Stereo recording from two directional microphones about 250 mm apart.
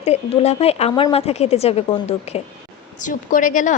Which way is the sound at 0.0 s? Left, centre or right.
Left.